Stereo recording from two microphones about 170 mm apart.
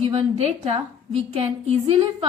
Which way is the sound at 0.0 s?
40° right (ahead or behind).